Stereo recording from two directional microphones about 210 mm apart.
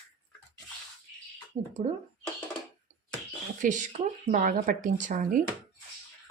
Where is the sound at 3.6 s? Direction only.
35° right (ahead or behind).